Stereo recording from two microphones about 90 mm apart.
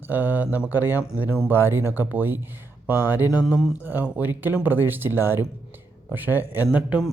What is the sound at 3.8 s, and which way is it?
Speech, 20° right (ahead or behind).